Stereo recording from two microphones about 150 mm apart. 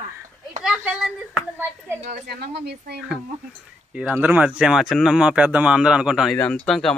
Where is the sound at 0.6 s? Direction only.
5° right (ahead or behind).